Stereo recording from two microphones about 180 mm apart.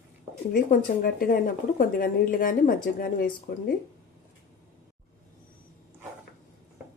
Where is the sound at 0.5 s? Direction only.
50° left (ahead or behind).